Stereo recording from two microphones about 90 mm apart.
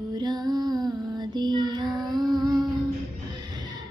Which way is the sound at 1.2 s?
55° right (ahead or behind).